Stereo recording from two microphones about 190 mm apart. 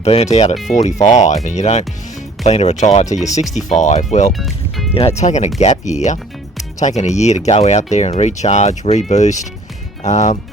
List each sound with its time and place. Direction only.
0.0 s speech: 35° left (ahead or behind)
4.3 s speech: centre (ahead or behind)
4.9 s speech: 35° left (ahead or behind)